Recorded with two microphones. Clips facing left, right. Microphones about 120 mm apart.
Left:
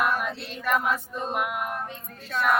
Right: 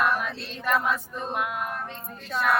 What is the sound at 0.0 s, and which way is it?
Music, 10° left (ahead or behind).